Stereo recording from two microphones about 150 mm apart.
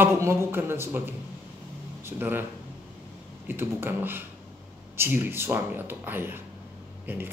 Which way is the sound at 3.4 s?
15° right (ahead or behind).